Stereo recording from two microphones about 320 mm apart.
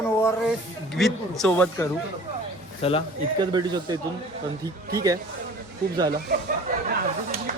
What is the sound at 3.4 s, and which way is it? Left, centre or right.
Speech, centre.